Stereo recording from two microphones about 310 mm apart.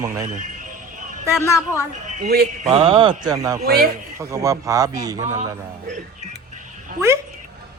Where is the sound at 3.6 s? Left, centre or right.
Right.